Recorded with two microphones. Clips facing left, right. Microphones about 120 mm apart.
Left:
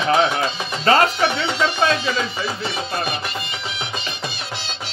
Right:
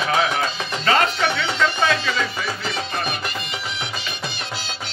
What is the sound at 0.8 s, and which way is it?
Music, 35° left (ahead or behind).